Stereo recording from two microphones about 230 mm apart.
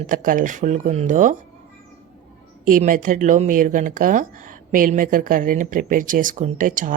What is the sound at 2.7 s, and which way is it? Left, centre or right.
Speech, right.